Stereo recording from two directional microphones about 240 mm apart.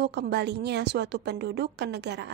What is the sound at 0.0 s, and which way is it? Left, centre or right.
A woman's voice, right.